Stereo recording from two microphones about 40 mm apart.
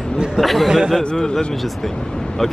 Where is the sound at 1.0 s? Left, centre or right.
Centre.